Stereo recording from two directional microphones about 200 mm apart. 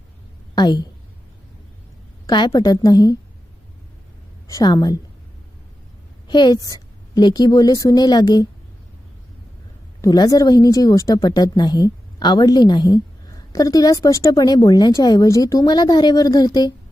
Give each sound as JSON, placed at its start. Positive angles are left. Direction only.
{"t": 0.5, "sound": "a woman's voice", "side_deg": 20}
{"t": 2.2, "sound": "a woman's voice", "side_deg": 20}
{"t": 4.4, "sound": "a woman's voice", "side_deg": 20}
{"t": 6.2, "sound": "a woman's voice", "side_deg": 20}
{"t": 10.0, "sound": "a woman's voice", "side_deg": 20}